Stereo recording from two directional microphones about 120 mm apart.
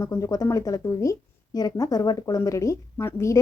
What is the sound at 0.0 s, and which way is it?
A woman's voice, 30° left (ahead or behind).